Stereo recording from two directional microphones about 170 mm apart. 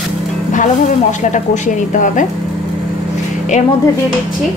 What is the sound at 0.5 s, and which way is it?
Speech, 45° left (ahead or behind).